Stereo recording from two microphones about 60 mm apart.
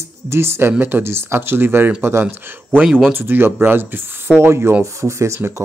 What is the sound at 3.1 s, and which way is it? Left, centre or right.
Speech, right.